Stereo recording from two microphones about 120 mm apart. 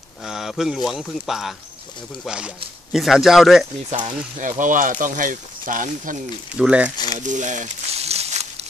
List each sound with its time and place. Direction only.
0.2 s a man's voice: 5° right (ahead or behind)
3.9 s speech: 40° right (ahead or behind)
4.4 s speech: 90° right
6.5 s speech: 10° right (ahead or behind)
7.2 s a sound: 90° right; by 8.6 s 60° right (ahead or behind)